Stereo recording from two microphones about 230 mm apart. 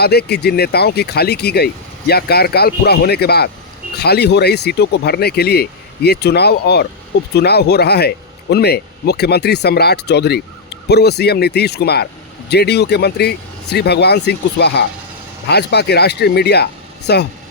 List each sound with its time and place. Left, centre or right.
0.0 s speech: left